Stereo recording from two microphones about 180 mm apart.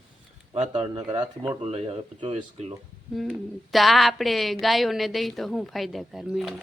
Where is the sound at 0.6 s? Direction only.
35° right (ahead or behind).